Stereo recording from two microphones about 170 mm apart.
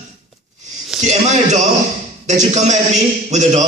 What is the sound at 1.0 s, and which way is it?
Speech, 45° right (ahead or behind).